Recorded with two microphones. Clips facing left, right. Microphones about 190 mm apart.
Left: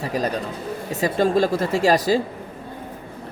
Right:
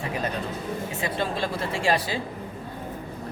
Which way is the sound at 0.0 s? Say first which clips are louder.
Left 5 dB; 40° left (ahead or behind).